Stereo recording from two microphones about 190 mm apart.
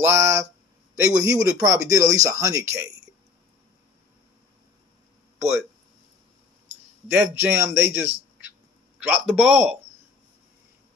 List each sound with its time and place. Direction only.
0.0 s a sound: 15° right (ahead or behind)
1.0 s speech: 15° right (ahead or behind)
7.1 s a man's voice: 10° right (ahead or behind)